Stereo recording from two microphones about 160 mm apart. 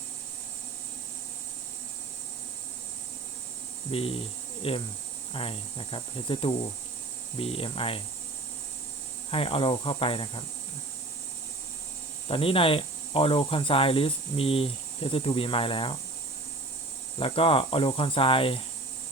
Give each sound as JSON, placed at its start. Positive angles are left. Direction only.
{"t": 3.9, "sound": "speech", "side_deg": 35}
{"t": 9.3, "sound": "speech", "side_deg": 35}
{"t": 12.3, "sound": "speech", "side_deg": 35}
{"t": 17.2, "sound": "speech", "side_deg": 35}